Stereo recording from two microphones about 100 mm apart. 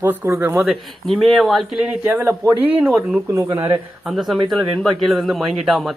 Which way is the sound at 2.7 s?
10° right (ahead or behind).